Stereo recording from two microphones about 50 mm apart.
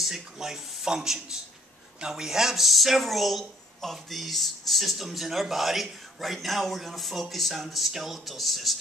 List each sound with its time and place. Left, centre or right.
0.0 s speech: centre